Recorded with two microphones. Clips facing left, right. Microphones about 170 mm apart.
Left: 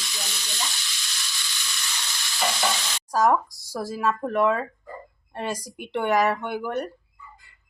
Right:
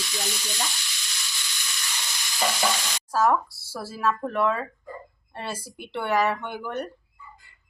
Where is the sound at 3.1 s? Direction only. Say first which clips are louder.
Left 1 dB; 15° left (ahead or behind).